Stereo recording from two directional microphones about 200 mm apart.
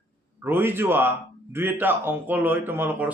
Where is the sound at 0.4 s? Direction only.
10° right (ahead or behind).